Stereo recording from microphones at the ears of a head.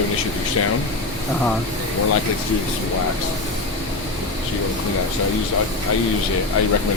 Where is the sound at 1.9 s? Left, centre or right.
Left.